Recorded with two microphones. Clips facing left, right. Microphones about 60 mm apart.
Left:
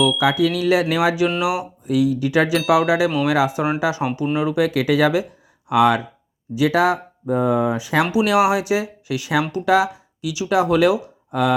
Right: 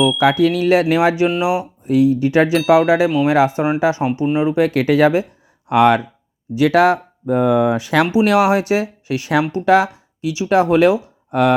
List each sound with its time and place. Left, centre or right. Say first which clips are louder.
0.2 s speech: right 4 dB; right
4.4 s speech: right 3 dB; right
4.6 s speech: right 3 dB; right
8.1 s speech: right 2 dB; right
11.3 s speech: right 4 dB; right